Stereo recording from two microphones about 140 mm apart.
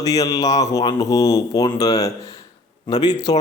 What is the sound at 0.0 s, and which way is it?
A man's voice, 25° left (ahead or behind).